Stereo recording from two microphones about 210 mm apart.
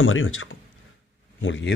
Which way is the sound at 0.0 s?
70° left (ahead or behind).